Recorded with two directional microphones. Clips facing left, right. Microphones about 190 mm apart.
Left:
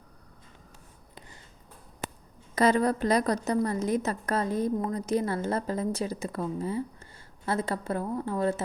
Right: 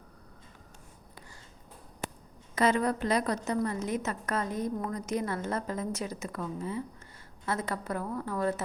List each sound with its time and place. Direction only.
2.6 s a woman's voice: 35° left (ahead or behind)